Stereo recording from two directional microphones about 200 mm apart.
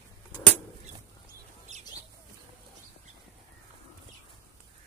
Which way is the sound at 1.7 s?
35° right (ahead or behind).